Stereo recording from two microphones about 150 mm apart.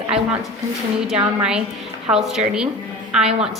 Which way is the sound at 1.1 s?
5° right (ahead or behind).